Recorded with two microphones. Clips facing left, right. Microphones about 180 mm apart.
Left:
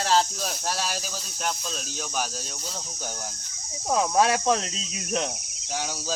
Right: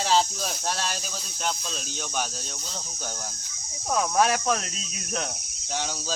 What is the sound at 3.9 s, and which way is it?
Cricket, 25° left (ahead or behind).